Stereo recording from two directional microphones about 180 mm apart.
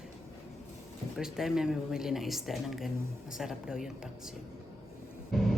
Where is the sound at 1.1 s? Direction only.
Centre (ahead or behind).